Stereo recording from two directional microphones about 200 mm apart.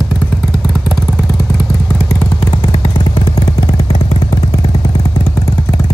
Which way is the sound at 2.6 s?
20° left (ahead or behind).